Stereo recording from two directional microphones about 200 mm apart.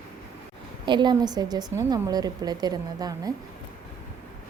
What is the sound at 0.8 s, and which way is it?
A woman's voice, 25° right (ahead or behind).